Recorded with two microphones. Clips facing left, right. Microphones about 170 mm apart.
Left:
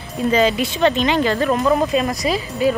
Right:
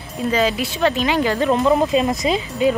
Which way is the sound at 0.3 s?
Centre (ahead or behind).